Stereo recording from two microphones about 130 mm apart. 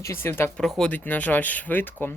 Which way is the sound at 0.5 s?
5° left (ahead or behind).